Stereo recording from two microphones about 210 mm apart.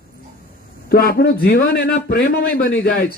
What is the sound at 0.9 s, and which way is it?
A man's voice, 45° left (ahead or behind).